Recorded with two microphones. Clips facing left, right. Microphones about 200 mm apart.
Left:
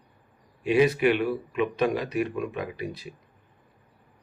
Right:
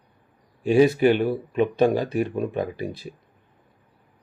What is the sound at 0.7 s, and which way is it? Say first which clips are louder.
Speech: right 4 dB; 40° right (ahead or behind).